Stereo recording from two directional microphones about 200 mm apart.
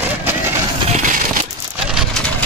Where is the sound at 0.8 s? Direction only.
40° right (ahead or behind).